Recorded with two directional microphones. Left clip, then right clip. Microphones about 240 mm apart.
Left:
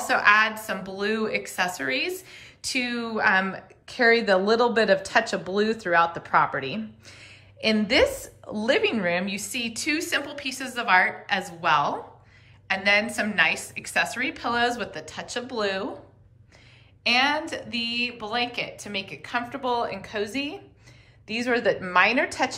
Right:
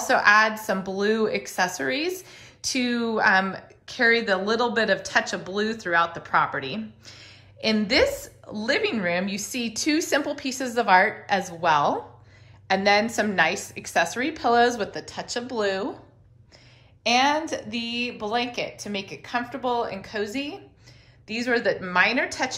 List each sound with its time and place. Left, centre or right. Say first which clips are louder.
0.0 s a woman's voice: right 1 dB; centre
17.0 s a woman's voice: right 1 dB; centre